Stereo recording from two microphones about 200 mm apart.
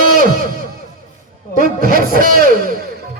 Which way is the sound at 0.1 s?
45° right (ahead or behind).